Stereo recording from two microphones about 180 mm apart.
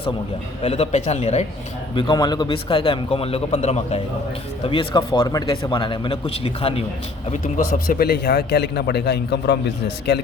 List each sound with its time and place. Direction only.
0.6 s speech: 35° left (ahead or behind)
2.0 s speech: 25° left (ahead or behind)
7.4 s a man's voice: 50° left (ahead or behind); by 9.6 s 70° left (ahead or behind)